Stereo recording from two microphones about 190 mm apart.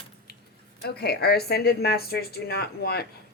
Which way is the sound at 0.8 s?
60° left (ahead or behind).